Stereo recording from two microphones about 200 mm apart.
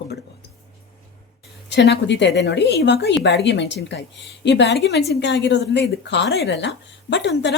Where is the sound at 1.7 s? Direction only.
60° left (ahead or behind).